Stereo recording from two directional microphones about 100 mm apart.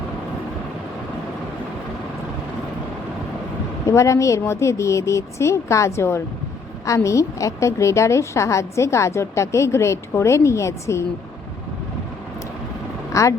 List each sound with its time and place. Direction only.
3.8 s a woman's voice: 30° left (ahead or behind)
13.1 s speech: 30° left (ahead or behind)